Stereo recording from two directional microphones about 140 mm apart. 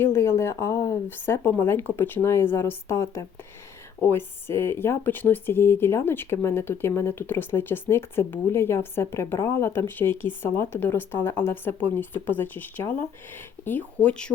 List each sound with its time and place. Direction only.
0.0 s speech: 20° left (ahead or behind)